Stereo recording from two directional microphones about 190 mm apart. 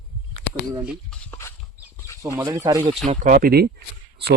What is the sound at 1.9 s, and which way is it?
Chicken, 15° left (ahead or behind).